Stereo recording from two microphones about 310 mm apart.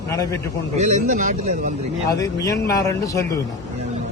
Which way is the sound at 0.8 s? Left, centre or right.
Right.